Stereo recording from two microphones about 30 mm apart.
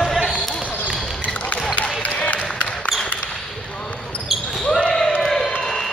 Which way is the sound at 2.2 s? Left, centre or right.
Left.